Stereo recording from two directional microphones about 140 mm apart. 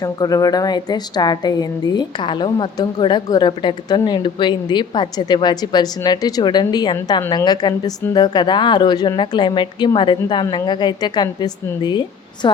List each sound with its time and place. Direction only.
0.0 s a woman's voice: 25° left (ahead or behind)